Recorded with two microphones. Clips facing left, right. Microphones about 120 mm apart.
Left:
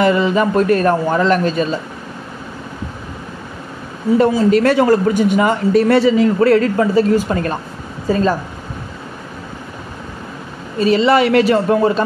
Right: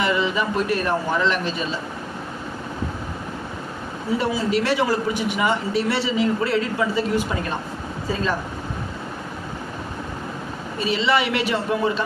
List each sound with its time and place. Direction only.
0.0 s speech: 45° left (ahead or behind)
4.6 s speech: 50° left (ahead or behind)
10.8 s speech: 45° left (ahead or behind)